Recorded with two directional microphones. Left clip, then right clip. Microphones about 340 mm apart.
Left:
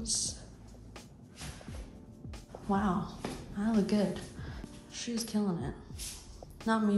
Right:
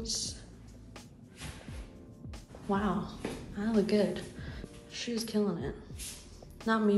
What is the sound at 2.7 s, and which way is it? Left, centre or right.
A woman's voice, centre.